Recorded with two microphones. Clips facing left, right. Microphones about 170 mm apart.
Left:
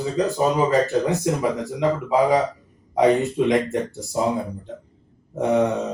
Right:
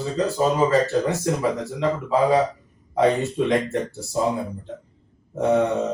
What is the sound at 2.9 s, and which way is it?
Speech, 15° left (ahead or behind).